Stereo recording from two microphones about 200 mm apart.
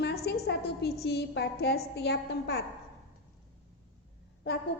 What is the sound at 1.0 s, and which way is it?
A woman's voice, 55° left (ahead or behind).